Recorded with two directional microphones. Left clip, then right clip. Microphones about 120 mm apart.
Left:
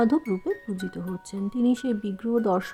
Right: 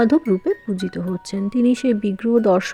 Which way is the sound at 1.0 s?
50° right (ahead or behind).